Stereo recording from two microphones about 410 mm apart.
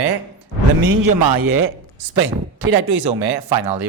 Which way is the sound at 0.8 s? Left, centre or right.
Right.